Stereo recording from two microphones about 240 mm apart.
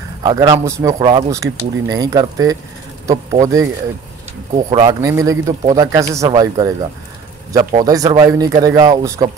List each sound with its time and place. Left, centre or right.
0.2 s speech: centre
4.6 s speech: centre